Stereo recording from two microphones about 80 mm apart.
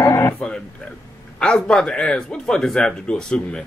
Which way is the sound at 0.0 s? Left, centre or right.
Left.